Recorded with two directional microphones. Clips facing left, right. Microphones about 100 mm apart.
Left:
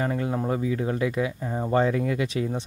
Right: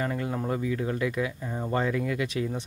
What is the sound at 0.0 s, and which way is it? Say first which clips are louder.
Speech: left 3 dB; 25° left (ahead or behind).